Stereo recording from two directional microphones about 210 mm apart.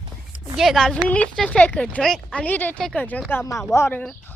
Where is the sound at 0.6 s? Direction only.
Centre (ahead or behind).